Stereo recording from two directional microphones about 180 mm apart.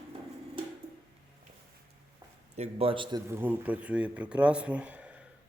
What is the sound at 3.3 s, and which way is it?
Speech, 10° right (ahead or behind).